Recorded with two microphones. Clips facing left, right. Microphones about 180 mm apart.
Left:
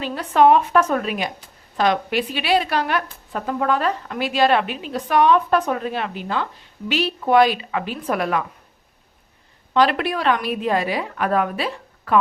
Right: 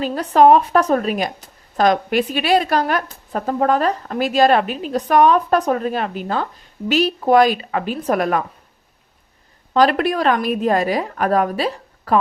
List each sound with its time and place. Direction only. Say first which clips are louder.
0.0 s speech: right 3 dB; 40° right (ahead or behind)
9.7 s a woman's voice: right 3 dB; 45° right (ahead or behind)